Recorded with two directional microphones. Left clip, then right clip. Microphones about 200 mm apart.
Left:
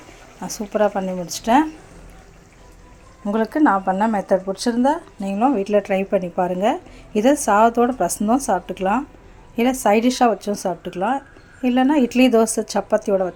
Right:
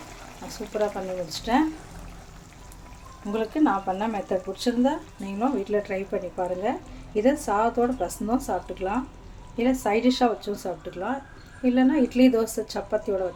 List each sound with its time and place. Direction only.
0.4 s speech: 40° left (ahead or behind)
3.3 s speech: 35° left (ahead or behind)